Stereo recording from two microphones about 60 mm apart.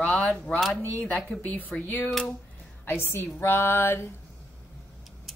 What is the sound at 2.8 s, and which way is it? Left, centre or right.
Speech, left.